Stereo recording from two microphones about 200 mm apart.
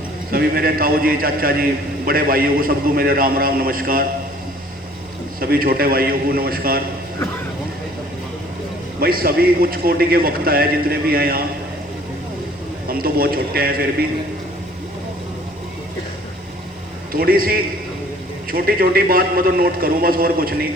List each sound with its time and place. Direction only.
0.3 s a man's voice: 50° right (ahead or behind)
5.4 s a man's voice: 50° right (ahead or behind)
9.0 s a man's voice: 50° right (ahead or behind)
12.9 s a man's voice: 50° right (ahead or behind)
17.1 s a man's voice: 45° right (ahead or behind)